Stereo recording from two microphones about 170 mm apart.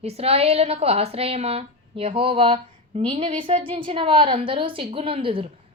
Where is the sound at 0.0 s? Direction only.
35° right (ahead or behind).